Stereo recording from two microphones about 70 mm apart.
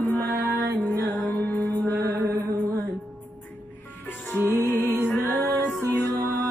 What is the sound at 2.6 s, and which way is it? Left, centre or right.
Music, right.